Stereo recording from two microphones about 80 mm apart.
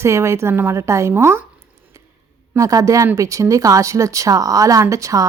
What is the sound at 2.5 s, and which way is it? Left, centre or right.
A woman's voice, right.